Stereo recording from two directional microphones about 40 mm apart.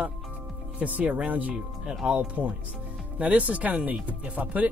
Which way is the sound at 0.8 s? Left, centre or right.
Right.